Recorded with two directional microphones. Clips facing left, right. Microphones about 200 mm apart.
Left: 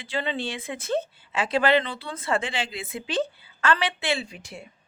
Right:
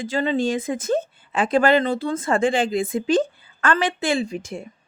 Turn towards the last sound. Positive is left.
turn(degrees=-45)  # may be behind; listen again after turning